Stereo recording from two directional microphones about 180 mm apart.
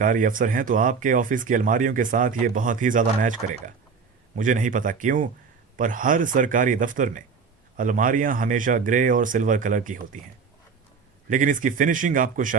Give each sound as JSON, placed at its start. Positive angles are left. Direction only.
{"t": 0.0, "sound": "speech", "side_deg": -50}
{"t": 11.3, "sound": "speech", "side_deg": -45}